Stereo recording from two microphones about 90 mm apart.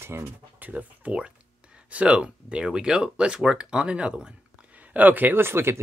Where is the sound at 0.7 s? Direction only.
15° right (ahead or behind).